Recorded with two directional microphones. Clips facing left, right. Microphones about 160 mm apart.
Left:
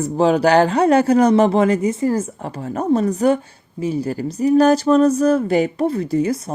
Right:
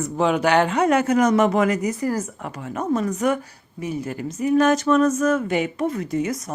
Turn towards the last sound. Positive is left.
turn(degrees=30)  # may be behind; listen again after turning